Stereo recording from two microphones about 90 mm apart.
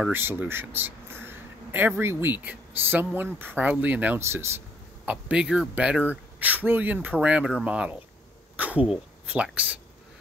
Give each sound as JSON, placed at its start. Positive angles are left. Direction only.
{"t": 0.1, "sound": "a man's voice", "side_deg": -25}
{"t": 4.2, "sound": "speech", "side_deg": -30}
{"t": 5.0, "sound": "speech", "side_deg": -15}